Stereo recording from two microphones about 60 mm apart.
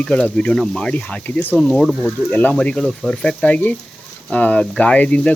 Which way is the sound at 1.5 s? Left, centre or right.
Centre.